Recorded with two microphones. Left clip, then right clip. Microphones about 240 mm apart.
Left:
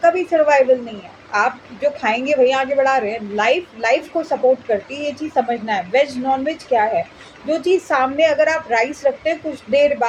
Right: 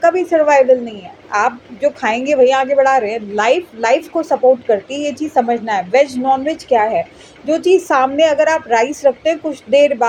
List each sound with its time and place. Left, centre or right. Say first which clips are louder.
0.0 s a woman's voice: right 2 dB; right